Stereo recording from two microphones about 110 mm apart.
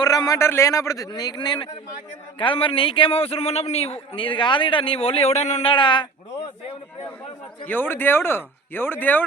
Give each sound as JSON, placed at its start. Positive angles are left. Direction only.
{"t": 0.0, "sound": "a man's voice", "side_deg": 35}
{"t": 5.7, "sound": "speech", "side_deg": 45}
{"t": 7.7, "sound": "speech", "side_deg": 20}